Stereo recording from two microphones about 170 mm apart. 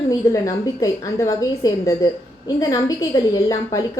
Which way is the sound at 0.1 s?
20° left (ahead or behind).